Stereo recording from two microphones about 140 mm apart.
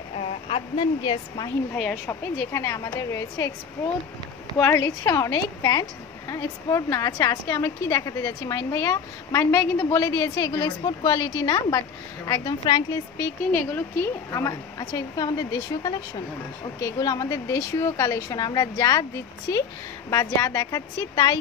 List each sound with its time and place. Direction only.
0.5 s speech: 40° left (ahead or behind)
1.8 s a woman's voice: 10° left (ahead or behind)
2.5 s a woman's voice: 25° left (ahead or behind)
4.6 s a woman's voice: 15° left (ahead or behind)
13.5 s a woman's voice: 15° left (ahead or behind)
20.1 s a woman's voice: 20° left (ahead or behind)